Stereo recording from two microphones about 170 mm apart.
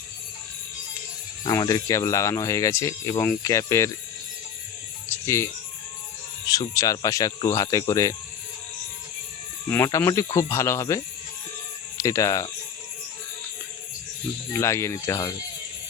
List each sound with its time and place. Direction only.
1.5 s speech: 25° left (ahead or behind)
5.2 s speech: 15° left (ahead or behind)
6.5 s speech: 20° left (ahead or behind)
9.6 s speech: 15° left (ahead or behind)
14.5 s speech: 15° left (ahead or behind)